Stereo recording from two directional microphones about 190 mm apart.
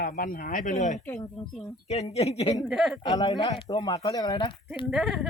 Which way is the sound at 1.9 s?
35° left (ahead or behind).